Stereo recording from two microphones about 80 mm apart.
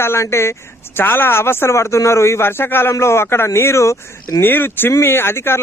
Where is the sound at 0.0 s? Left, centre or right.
Left.